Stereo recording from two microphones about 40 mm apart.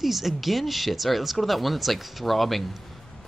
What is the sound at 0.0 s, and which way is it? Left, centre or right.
Speech, centre.